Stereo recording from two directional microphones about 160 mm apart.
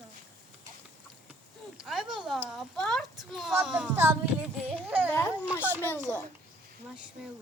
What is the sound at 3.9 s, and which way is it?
Speech, 15° right (ahead or behind).